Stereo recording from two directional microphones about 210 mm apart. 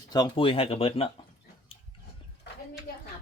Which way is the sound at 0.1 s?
20° left (ahead or behind).